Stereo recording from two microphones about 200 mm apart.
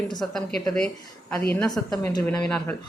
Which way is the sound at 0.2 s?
Centre (ahead or behind).